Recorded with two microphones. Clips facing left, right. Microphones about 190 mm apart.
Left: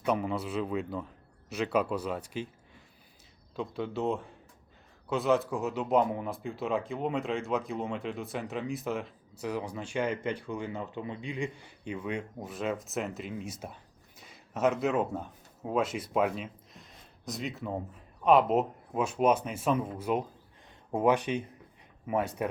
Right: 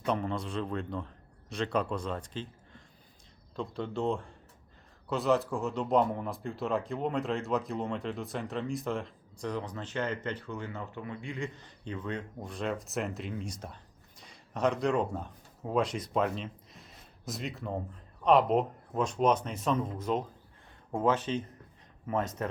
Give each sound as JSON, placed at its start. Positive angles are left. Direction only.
{"t": 0.0, "sound": "a man's voice", "side_deg": 5}